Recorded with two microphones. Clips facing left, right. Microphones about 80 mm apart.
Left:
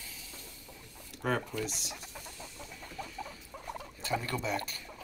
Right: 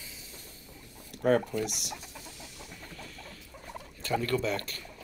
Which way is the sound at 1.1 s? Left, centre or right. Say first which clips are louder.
Right 7 dB; right.